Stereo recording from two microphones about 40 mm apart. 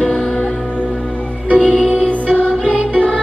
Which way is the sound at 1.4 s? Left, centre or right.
Right.